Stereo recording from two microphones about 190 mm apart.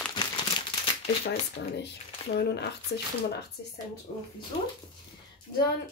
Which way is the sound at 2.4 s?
60° left (ahead or behind).